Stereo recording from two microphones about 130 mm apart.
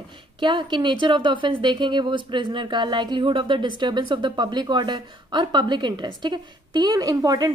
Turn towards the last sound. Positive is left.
turn(degrees=-30)  # may be behind; listen again after turning